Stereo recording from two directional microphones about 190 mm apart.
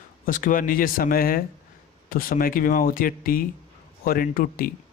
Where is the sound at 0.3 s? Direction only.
45° left (ahead or behind).